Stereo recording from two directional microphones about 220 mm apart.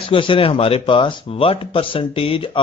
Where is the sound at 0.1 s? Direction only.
25° left (ahead or behind).